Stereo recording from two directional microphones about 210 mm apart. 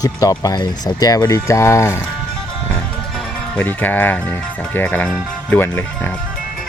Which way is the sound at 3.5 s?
10° left (ahead or behind).